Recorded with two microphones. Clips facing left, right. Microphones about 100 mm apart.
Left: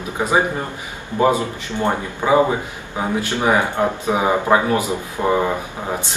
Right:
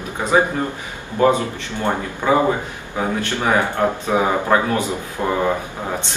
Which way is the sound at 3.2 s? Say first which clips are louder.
Left 2 dB; 15° left (ahead or behind).